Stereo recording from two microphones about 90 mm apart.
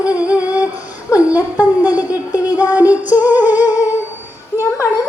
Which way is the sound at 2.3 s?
40° left (ahead or behind).